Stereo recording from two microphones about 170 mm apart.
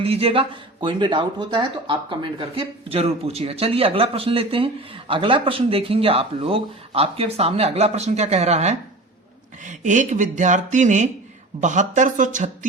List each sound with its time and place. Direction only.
0.0 s speech: 35° right (ahead or behind)